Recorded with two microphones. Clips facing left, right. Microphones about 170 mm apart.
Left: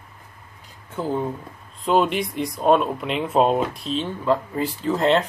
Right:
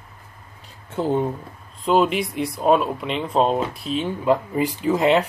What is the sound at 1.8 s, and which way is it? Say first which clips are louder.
Speech: right 1 dB; centre (ahead or behind).